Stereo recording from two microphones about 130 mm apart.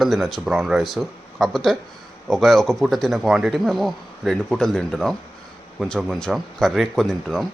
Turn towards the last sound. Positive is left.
turn(degrees=0)  # may be behind; listen again after turning